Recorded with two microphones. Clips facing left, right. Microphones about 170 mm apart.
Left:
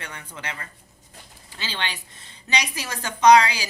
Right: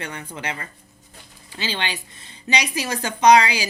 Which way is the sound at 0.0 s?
20° right (ahead or behind).